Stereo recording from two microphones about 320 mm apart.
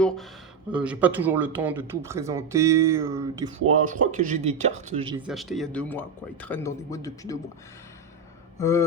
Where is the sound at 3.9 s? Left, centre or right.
Right.